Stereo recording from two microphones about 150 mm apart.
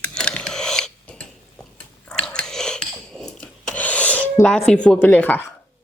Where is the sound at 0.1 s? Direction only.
5° left (ahead or behind).